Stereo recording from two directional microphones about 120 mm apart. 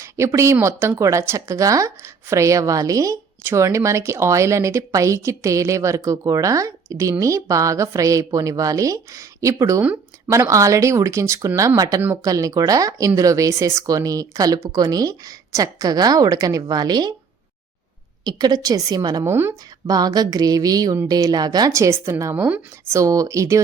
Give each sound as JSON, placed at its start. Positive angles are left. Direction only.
{"t": 0.0, "sound": "a woman's voice", "side_deg": -25}
{"t": 18.3, "sound": "a woman's voice", "side_deg": -35}
{"t": 19.2, "sound": "a woman's voice", "side_deg": -20}
{"t": 19.9, "sound": "a woman's voice", "side_deg": -30}
{"t": 23.0, "sound": "a woman's voice", "side_deg": -30}